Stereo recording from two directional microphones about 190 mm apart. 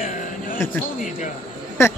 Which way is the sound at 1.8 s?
15° left (ahead or behind).